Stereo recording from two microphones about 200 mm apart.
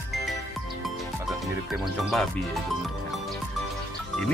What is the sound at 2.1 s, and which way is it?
Speech, centre (ahead or behind).